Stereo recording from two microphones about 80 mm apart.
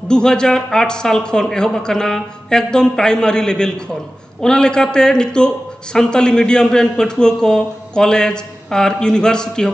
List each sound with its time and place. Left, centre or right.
0.1 s a man's voice: centre